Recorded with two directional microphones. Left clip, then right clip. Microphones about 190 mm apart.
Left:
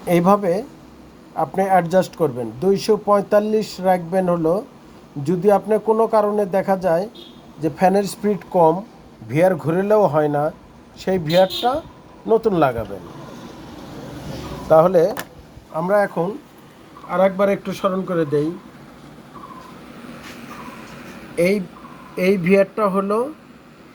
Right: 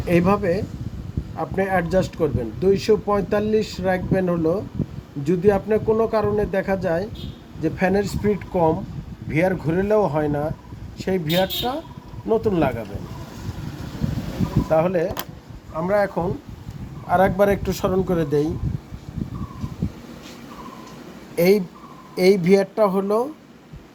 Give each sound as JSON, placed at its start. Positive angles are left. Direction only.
{"t": 0.1, "sound": "speech", "side_deg": 10}
{"t": 14.7, "sound": "speech", "side_deg": 25}
{"t": 15.7, "sound": "speech", "side_deg": 10}
{"t": 17.1, "sound": "speech", "side_deg": -30}
{"t": 21.3, "sound": "speech", "side_deg": -40}
{"t": 22.1, "sound": "speech", "side_deg": -25}